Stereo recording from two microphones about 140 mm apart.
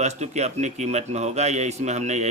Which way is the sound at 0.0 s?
55° right (ahead or behind).